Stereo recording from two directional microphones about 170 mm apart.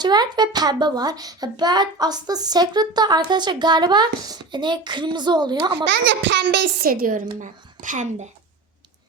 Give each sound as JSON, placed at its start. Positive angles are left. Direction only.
{"t": 0.0, "sound": "a woman's voice", "side_deg": -25}
{"t": 5.9, "sound": "a child's voice", "side_deg": -90}